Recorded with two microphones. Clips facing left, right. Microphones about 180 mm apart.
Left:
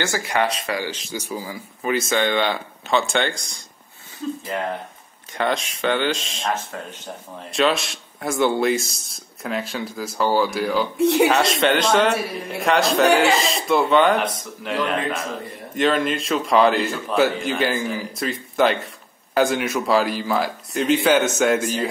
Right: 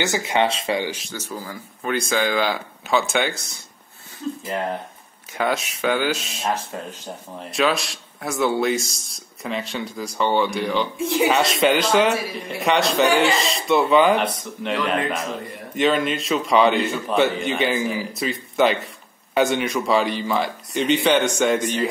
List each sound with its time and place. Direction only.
0.0 s speech: 20° right (ahead or behind)
1.1 s speech: 10° left (ahead or behind); by 3.4 s 5° right (ahead or behind)
5.3 s speech: 5° right (ahead or behind)
7.5 s speech: centre (ahead or behind)
11.0 s speech: 65° left (ahead or behind)
11.2 s speech: centre (ahead or behind)